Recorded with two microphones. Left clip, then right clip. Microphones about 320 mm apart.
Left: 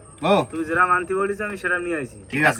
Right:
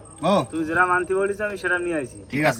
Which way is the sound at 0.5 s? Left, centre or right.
Right.